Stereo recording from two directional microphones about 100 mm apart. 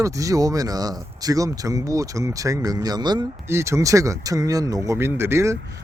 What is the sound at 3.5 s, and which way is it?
Speech, 30° right (ahead or behind).